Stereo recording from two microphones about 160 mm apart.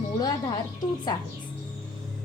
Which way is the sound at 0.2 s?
25° left (ahead or behind).